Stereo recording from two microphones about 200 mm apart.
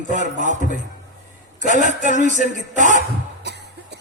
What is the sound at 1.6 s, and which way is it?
A man's voice, 40° right (ahead or behind).